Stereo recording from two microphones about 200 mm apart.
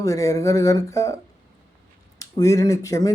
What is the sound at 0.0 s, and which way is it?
Speech, 15° left (ahead or behind).